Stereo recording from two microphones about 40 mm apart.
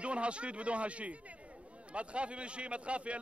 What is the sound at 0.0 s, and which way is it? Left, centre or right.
Speech, right.